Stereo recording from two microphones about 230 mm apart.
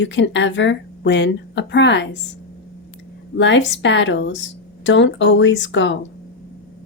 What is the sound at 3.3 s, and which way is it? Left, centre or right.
Speech, left.